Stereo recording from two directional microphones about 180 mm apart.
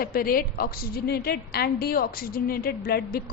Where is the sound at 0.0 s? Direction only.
55° left (ahead or behind).